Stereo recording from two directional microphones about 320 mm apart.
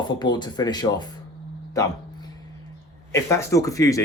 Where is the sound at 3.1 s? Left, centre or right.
Centre.